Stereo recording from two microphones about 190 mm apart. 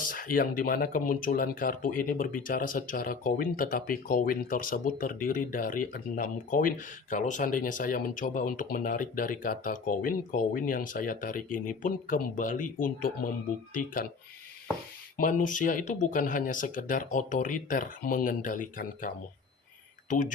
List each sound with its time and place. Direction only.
0.1 s speech: 50° left (ahead or behind)
15.2 s speech: 45° left (ahead or behind)